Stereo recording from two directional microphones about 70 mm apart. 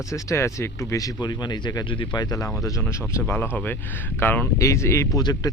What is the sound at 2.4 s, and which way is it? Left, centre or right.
Speech, left.